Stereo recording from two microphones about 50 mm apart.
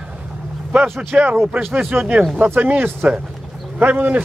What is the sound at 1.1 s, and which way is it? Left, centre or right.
A man's voice, right.